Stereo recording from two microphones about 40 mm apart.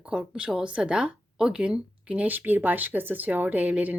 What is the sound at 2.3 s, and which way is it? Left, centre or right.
Speech, right.